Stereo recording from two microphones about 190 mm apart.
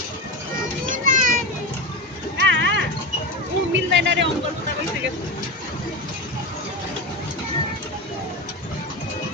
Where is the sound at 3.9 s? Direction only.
70° right (ahead or behind).